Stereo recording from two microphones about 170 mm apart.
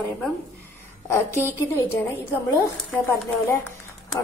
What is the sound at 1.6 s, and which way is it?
Speech, 15° left (ahead or behind).